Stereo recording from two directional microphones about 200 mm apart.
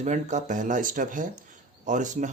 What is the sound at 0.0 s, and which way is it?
Speech, 35° right (ahead or behind).